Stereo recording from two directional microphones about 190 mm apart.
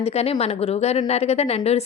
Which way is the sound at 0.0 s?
35° left (ahead or behind).